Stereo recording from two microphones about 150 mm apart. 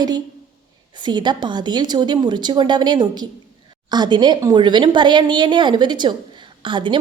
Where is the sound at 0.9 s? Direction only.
30° right (ahead or behind).